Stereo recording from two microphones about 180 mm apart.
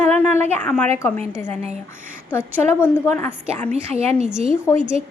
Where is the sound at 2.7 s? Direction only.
10° left (ahead or behind).